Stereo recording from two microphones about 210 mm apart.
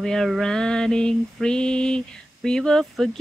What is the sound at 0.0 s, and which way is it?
Mantra, centre (ahead or behind).